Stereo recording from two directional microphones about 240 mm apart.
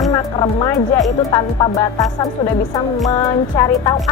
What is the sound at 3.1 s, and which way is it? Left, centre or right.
Speech, centre.